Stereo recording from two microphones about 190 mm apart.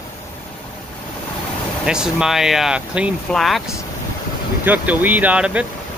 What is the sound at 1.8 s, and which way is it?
Speech, 5° right (ahead or behind).